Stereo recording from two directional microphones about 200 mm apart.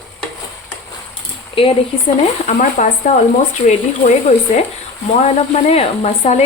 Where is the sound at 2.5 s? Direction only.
35° left (ahead or behind).